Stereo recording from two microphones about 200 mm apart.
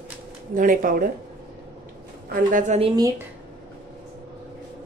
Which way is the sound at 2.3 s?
40° right (ahead or behind).